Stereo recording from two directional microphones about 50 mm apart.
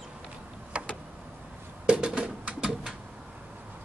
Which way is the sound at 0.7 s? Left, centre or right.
Right.